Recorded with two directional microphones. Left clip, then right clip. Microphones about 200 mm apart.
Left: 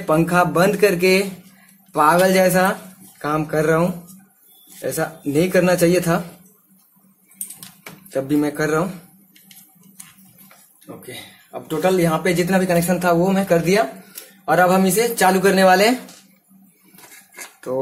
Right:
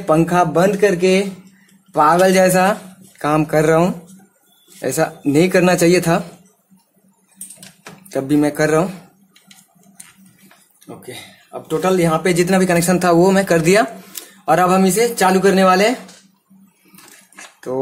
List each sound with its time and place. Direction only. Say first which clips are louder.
0.0 s speech: right 2 dB; 15° right (ahead or behind)
1.9 s speech: right 2 dB; 15° right (ahead or behind)
8.1 s speech: right 3 dB; 25° right (ahead or behind)
11.0 s speech: right 1 dB; 15° right (ahead or behind); by 14.5 s 40° right (ahead or behind)
14.5 s speech: right 2 dB; 20° right (ahead or behind)
17.7 s speech: right 1 dB; 15° right (ahead or behind)